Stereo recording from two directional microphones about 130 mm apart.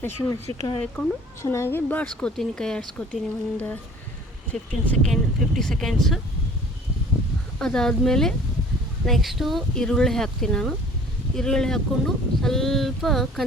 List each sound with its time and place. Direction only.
0.0 s speech: 25° left (ahead or behind)
1.0 s speech: centre (ahead or behind)
1.4 s speech: 20° left (ahead or behind); by 6.1 s centre (ahead or behind)
7.6 s speech: 5° left (ahead or behind)